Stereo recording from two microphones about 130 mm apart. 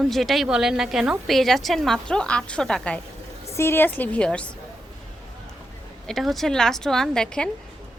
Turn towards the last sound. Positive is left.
turn(degrees=5)  # may be behind; listen again after turning